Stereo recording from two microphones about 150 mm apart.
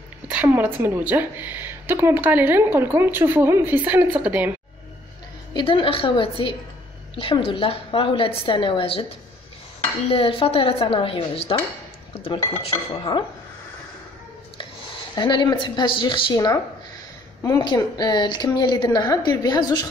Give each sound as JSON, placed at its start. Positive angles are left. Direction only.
{"t": 0.3, "sound": "a woman's voice", "side_deg": -10}
{"t": 5.5, "sound": "a woman's voice", "side_deg": 35}
{"t": 10.0, "sound": "a woman's voice", "side_deg": 40}
{"t": 15.1, "sound": "a woman's voice", "side_deg": 30}